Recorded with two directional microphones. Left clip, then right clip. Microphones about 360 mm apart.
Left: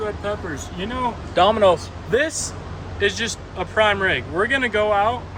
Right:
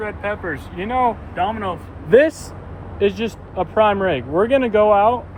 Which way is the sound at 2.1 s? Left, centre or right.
Centre.